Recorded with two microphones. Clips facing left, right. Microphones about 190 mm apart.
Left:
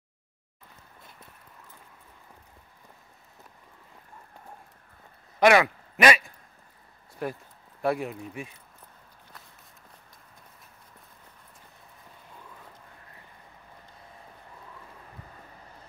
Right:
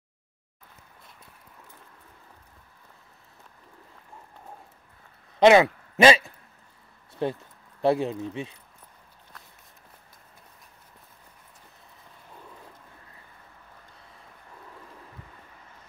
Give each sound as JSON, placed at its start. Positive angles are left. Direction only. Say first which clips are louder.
{"t": 5.4, "sound": "speech", "louder": "right 4 dB", "side_deg": -25}